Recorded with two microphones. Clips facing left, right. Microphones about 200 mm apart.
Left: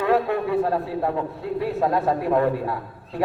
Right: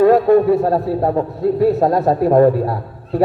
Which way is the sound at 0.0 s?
40° right (ahead or behind).